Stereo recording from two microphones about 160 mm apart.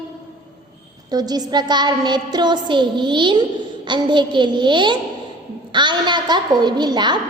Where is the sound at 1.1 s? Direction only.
25° right (ahead or behind).